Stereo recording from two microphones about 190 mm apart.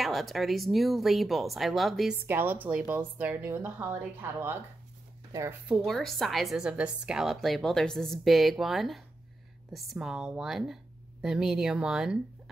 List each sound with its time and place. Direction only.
0.0 s a woman's voice: centre (ahead or behind); by 5.6 s 15° right (ahead or behind)
5.9 s a woman's voice: centre (ahead or behind)